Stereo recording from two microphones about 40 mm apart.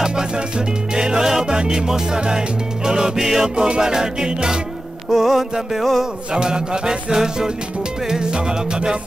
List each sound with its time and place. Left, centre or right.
0.0 s music: centre
3.4 s music: right
5.1 s music: centre
6.3 s music: centre